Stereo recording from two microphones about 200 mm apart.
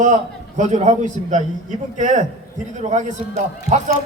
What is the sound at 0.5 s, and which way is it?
A man's voice, 35° right (ahead or behind).